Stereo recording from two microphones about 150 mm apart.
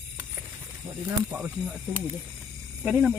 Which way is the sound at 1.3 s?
10° right (ahead or behind).